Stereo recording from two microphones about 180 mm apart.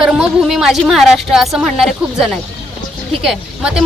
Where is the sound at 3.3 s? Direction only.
5° right (ahead or behind).